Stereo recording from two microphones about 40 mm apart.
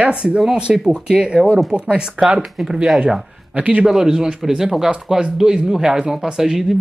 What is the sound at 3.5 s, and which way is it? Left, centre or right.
Speech, right.